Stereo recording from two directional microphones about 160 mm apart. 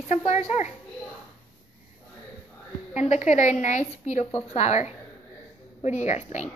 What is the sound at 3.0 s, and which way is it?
A woman's voice, 50° left (ahead or behind).